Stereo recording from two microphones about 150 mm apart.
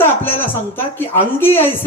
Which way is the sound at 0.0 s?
15° left (ahead or behind).